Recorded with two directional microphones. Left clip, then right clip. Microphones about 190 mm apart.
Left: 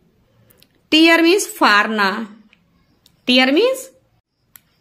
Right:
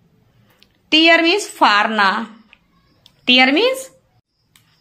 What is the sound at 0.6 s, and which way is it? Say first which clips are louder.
A woman's voice: even; 30° left (ahead or behind).